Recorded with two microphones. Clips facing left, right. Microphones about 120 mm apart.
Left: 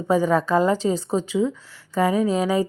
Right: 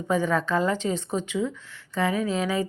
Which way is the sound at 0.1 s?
35° left (ahead or behind).